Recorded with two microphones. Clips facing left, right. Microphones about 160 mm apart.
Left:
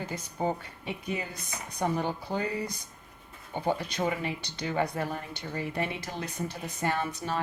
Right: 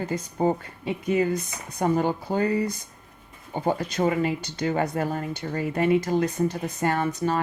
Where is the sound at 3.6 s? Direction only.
45° right (ahead or behind).